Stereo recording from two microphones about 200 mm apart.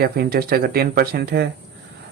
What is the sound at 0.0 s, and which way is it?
Speech, 50° right (ahead or behind).